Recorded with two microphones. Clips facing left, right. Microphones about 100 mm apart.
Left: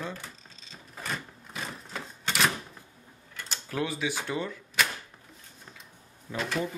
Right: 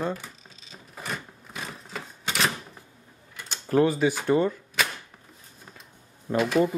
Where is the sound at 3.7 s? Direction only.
40° right (ahead or behind).